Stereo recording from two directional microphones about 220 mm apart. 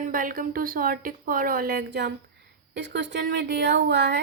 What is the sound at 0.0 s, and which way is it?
A woman's voice, 40° right (ahead or behind).